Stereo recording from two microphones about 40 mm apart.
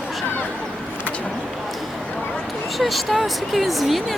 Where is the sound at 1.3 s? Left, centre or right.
Centre.